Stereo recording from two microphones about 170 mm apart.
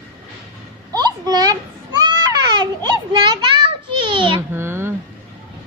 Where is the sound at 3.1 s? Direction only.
25° right (ahead or behind).